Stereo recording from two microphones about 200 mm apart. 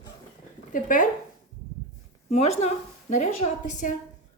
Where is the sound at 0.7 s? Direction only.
40° left (ahead or behind).